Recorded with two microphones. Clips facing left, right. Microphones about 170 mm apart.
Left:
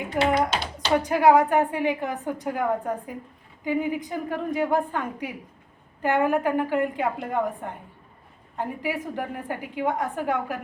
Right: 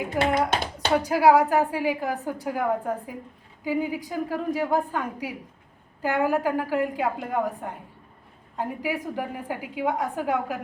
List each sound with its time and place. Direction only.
0.2 s speech: 50° right (ahead or behind)
0.9 s a woman's voice: 5° right (ahead or behind)